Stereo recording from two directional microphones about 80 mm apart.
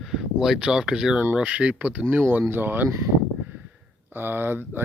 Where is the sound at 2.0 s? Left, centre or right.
Right.